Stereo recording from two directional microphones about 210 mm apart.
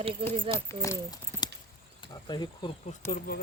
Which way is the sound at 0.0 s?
25° right (ahead or behind).